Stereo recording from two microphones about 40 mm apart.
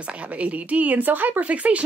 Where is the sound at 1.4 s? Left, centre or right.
Right.